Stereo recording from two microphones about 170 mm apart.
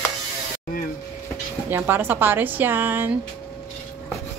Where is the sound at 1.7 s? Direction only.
15° right (ahead or behind).